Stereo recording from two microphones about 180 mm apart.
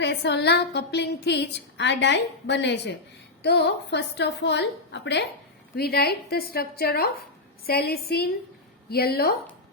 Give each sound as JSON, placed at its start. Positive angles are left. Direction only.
{"t": 0.0, "sound": "a woman's voice", "side_deg": 70}
{"t": 5.7, "sound": "a woman's voice", "side_deg": 60}